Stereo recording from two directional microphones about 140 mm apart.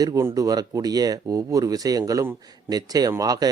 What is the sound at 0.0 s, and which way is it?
Speech, 20° right (ahead or behind).